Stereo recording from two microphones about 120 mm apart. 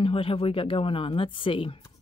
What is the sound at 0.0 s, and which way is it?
Speech, 50° left (ahead or behind).